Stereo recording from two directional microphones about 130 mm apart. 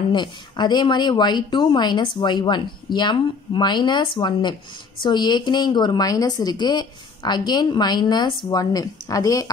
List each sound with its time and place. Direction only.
0.1 s a woman's voice: 35° left (ahead or behind)